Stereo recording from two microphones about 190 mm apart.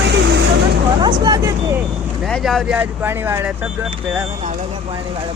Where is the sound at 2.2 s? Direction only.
Centre (ahead or behind).